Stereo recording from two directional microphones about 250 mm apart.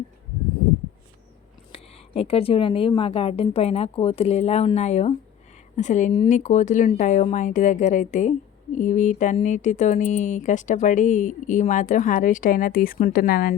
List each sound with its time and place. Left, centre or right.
1.7 s speech: left